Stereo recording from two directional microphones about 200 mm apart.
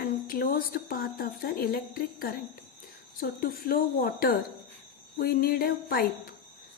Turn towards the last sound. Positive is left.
turn(degrees=50)  # may be behind; listen again after turning